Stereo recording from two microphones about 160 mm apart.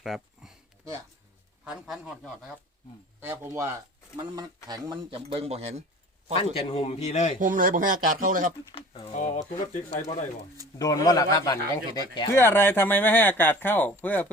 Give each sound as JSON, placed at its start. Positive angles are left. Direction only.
{"t": 0.0, "sound": "a sound", "side_deg": 0}
{"t": 1.6, "sound": "a man's voice", "side_deg": -5}
{"t": 3.2, "sound": "speech", "side_deg": -15}
{"t": 6.3, "sound": "a man's voice", "side_deg": 35}
{"t": 7.3, "sound": "speech", "side_deg": -55}
{"t": 8.7, "sound": "a man's voice", "side_deg": 35}
{"t": 9.1, "sound": "speech", "side_deg": 50}
{"t": 10.8, "sound": "speech", "side_deg": 20}
{"t": 12.3, "sound": "speech", "side_deg": 15}